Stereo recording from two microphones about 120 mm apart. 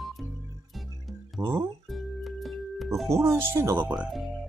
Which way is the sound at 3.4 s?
20° right (ahead or behind).